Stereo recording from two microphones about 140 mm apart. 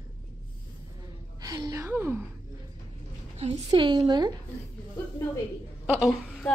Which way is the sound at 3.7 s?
30° right (ahead or behind).